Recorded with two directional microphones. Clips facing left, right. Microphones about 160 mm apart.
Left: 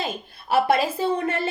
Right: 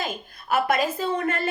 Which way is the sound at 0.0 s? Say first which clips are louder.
Left 1 dB; 30° left (ahead or behind).